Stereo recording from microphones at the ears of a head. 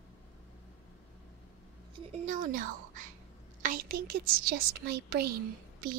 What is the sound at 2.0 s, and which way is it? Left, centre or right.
A woman's voice, right.